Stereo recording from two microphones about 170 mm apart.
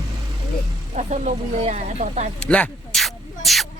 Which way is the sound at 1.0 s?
40° right (ahead or behind).